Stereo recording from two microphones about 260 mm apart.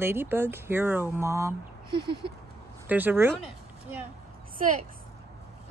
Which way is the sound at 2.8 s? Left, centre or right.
Centre.